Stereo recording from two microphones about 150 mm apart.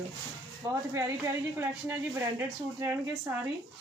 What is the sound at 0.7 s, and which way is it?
Speech, 20° right (ahead or behind).